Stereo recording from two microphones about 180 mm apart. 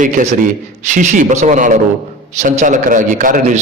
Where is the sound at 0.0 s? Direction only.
45° right (ahead or behind).